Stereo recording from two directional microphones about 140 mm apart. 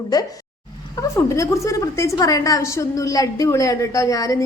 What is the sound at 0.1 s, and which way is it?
A woman's voice, 30° left (ahead or behind).